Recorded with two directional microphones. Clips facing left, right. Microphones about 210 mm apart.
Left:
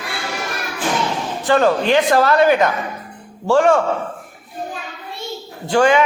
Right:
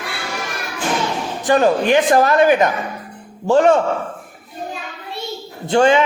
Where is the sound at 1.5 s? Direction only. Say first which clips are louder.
Right 1 dB; 15° right (ahead or behind).